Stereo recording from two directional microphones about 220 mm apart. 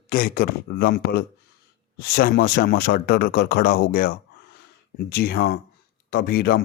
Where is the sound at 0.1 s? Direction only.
40° left (ahead or behind).